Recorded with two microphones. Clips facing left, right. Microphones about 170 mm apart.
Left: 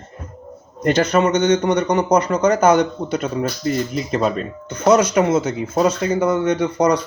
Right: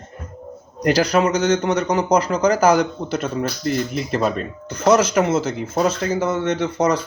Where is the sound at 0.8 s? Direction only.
10° right (ahead or behind).